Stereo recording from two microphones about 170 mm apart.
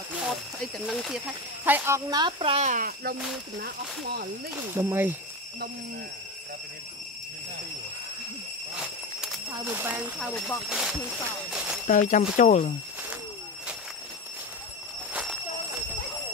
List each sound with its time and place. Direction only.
0.8 s speech: centre (ahead or behind)
2.0 s speech: 25° right (ahead or behind); by 4.3 s 65° right (ahead or behind)
4.6 s speech: 15° right (ahead or behind)
9.2 s speech: 10° right (ahead or behind)
10.3 s speech: 10° left (ahead or behind)
10.7 s speech: 5° right (ahead or behind)
11.9 s speech: 50° left (ahead or behind)